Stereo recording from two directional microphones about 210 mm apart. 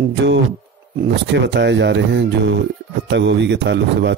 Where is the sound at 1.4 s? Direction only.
55° right (ahead or behind).